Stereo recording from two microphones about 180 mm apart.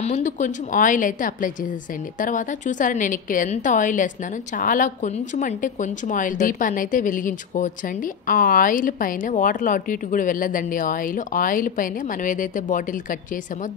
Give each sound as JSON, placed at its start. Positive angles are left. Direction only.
{"t": 0.0, "sound": "a woman's voice", "side_deg": 45}